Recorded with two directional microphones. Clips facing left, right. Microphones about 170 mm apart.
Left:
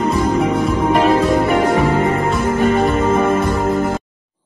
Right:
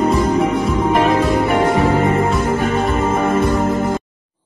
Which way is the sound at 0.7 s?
Centre (ahead or behind).